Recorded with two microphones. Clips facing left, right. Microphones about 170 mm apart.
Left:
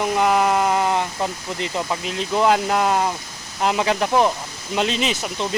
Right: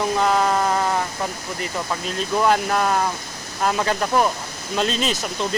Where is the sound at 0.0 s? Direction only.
15° left (ahead or behind).